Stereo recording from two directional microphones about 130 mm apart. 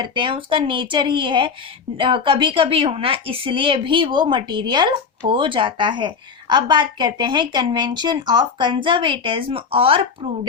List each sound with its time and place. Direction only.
0.0 s speech: 40° right (ahead or behind)